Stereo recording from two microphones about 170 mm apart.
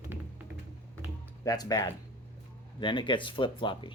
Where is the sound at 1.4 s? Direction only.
20° left (ahead or behind).